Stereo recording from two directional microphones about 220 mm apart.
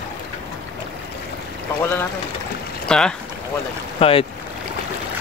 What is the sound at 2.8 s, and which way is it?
Speech, 5° left (ahead or behind).